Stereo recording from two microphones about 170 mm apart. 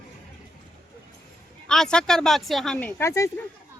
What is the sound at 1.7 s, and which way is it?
Speech, 5° left (ahead or behind).